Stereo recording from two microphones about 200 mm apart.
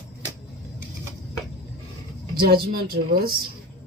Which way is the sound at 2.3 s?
50° right (ahead or behind).